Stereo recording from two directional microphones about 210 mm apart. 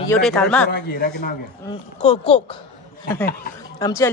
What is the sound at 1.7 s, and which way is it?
Speech, 30° left (ahead or behind).